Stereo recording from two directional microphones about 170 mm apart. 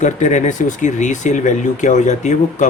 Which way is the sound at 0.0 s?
45° left (ahead or behind).